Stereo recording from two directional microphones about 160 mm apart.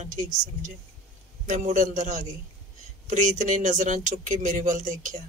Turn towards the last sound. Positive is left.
turn(degrees=-55)  # may be behind; listen again after turning